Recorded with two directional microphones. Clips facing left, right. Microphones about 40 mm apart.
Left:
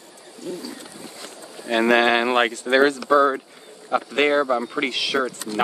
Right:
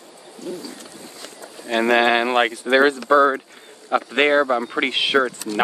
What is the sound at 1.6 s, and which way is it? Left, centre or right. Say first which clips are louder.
Speech: even; centre.